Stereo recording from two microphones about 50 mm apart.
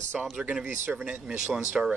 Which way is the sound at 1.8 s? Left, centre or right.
Right.